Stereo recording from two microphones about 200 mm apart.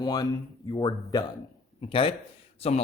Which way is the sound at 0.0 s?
20° left (ahead or behind).